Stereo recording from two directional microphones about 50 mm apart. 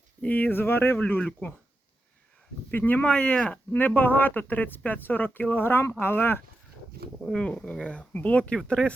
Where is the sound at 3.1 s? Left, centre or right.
Left.